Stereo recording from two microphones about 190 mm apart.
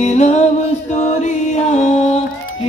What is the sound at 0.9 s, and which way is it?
Music, 35° left (ahead or behind).